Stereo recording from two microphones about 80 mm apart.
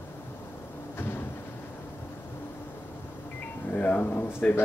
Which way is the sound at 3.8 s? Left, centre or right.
Centre.